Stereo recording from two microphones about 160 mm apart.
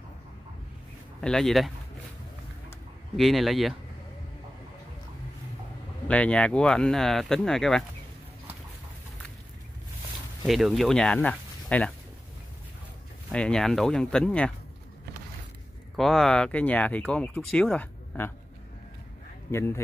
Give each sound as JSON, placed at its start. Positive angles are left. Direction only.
{"t": 1.2, "sound": "speech", "side_deg": 5}
{"t": 3.2, "sound": "speech", "side_deg": 0}
{"t": 6.0, "sound": "speech", "side_deg": 10}
{"t": 10.4, "sound": "speech", "side_deg": 0}
{"t": 13.3, "sound": "speech", "side_deg": 5}
{"t": 16.0, "sound": "speech", "side_deg": 0}
{"t": 19.5, "sound": "speech", "side_deg": 15}